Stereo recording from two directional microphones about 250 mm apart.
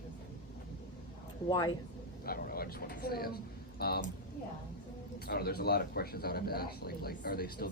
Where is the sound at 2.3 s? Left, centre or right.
Left.